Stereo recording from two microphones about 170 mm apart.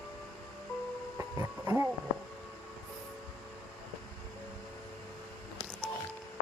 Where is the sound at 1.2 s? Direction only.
15° right (ahead or behind).